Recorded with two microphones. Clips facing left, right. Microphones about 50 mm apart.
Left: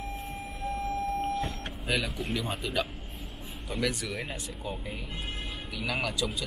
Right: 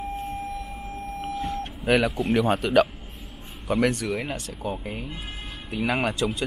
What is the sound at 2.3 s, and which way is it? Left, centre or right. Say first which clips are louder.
Speech: right 12 dB; right.